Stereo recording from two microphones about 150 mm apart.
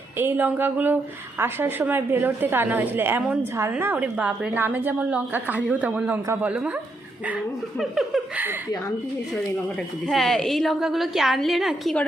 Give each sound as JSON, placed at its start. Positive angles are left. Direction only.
{"t": 0.2, "sound": "a woman's voice", "side_deg": -15}
{"t": 10.1, "sound": "a woman's voice", "side_deg": 0}